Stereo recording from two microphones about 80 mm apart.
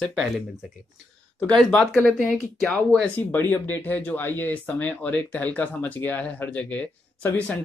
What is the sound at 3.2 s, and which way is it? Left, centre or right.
Speech, left.